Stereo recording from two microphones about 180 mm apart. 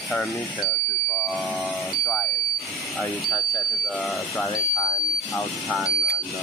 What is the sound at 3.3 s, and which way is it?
Speech, 20° left (ahead or behind).